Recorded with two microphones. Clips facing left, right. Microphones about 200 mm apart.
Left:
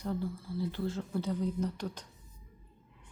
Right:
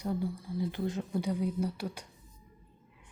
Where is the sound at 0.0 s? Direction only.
10° right (ahead or behind).